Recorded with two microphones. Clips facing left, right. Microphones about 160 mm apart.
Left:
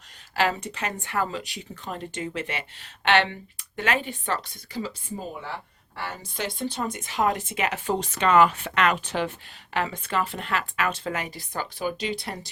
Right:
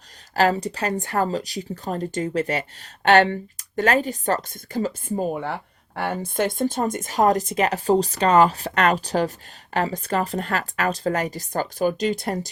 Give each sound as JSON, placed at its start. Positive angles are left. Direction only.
{"t": 0.3, "sound": "speech", "side_deg": -40}